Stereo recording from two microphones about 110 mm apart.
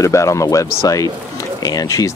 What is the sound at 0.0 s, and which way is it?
Speech, 30° left (ahead or behind).